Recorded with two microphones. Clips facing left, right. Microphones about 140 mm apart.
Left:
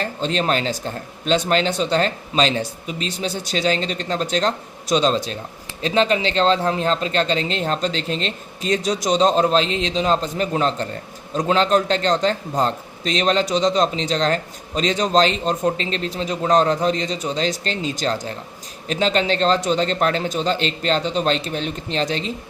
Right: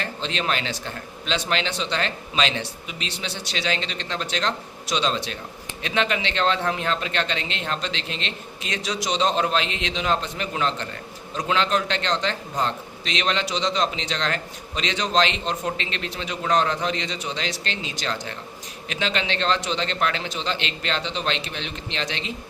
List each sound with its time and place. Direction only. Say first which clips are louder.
0.0 s a man's voice: left 6 dB; 40° left (ahead or behind)